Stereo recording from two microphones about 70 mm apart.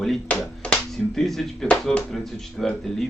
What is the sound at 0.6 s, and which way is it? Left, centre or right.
Music, centre.